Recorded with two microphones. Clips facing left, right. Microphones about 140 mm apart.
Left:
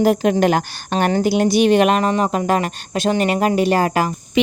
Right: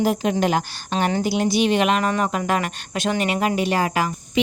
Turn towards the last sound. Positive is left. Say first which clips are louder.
# left 5 dB
turn(degrees=40)  # may be behind; listen again after turning